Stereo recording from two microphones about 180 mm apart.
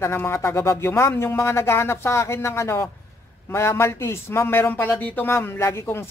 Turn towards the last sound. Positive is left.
turn(degrees=15)  # may be behind; listen again after turning